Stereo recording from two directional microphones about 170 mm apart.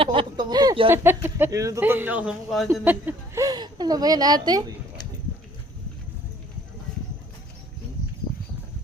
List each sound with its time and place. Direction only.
0.0 s a woman's voice: 30° right (ahead or behind)
0.9 s a man's voice: 10° right (ahead or behind)